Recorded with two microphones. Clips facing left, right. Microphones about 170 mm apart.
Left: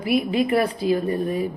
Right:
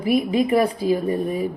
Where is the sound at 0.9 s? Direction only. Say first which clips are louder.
Right 1 dB; 10° right (ahead or behind).